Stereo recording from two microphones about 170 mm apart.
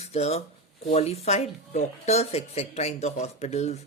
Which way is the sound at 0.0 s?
40° left (ahead or behind).